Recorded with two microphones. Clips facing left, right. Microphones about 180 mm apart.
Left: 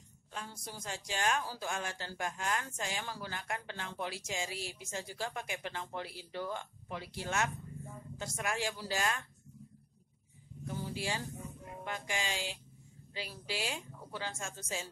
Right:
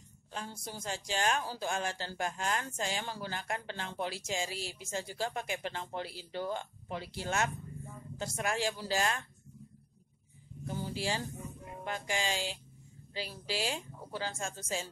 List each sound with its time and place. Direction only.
0.3 s speech: 30° right (ahead or behind)
10.7 s speech: 30° right (ahead or behind)